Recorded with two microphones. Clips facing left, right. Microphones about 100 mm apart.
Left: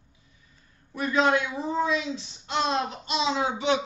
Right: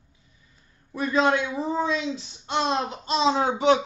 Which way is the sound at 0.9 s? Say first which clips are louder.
Right 1 dB; 30° right (ahead or behind).